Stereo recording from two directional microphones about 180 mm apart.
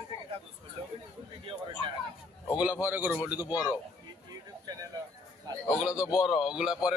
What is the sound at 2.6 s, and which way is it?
Speech, 10° right (ahead or behind).